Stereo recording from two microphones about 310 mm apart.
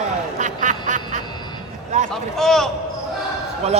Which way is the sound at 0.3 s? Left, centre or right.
Right.